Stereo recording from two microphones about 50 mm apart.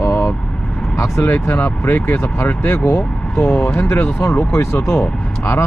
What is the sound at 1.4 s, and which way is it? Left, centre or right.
Speech, left.